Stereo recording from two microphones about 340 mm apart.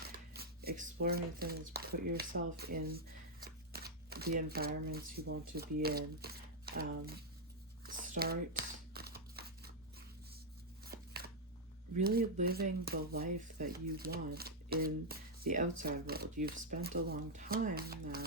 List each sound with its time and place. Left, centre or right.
0.0 s shuffling cards: right
1.0 s speech: right
3.4 s shuffling cards: right
5.2 s speech: right
7.9 s a sound: right
10.8 s chopping: right
11.9 s speech: right